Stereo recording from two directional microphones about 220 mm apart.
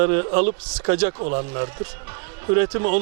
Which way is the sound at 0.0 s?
15° right (ahead or behind).